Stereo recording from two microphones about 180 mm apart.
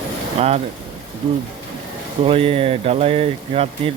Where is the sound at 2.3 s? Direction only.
30° right (ahead or behind).